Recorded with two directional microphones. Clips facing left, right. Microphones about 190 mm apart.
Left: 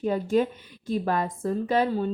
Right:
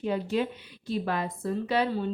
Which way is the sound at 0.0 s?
45° left (ahead or behind).